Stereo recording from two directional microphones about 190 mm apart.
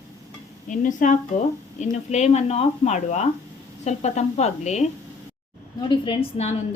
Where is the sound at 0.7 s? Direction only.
45° left (ahead or behind).